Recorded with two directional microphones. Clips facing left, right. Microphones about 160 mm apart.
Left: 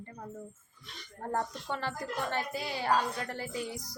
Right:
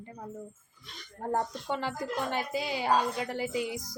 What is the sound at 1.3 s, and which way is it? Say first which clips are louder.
Speech: right 3 dB; 15° right (ahead or behind).